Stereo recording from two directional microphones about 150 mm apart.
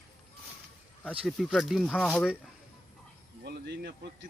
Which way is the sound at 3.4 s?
90° right.